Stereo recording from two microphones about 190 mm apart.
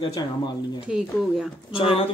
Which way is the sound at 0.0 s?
20° left (ahead or behind).